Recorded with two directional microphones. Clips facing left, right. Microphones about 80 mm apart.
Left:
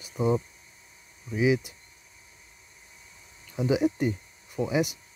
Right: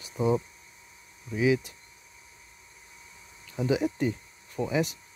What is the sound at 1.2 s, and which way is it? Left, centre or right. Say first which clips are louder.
Speech: left 1 dB; centre.